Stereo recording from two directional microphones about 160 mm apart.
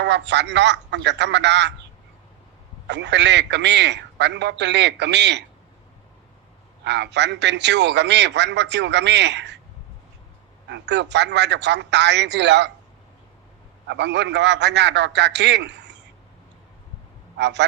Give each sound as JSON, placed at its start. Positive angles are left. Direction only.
{"t": 0.0, "sound": "a man's voice", "side_deg": -90}
{"t": 2.8, "sound": "a man's voice", "side_deg": -90}
{"t": 6.8, "sound": "a man's voice", "side_deg": -90}
{"t": 10.7, "sound": "a man's voice", "side_deg": -90}
{"t": 13.8, "sound": "a man's voice", "side_deg": -90}
{"t": 17.3, "sound": "a man's voice", "side_deg": -90}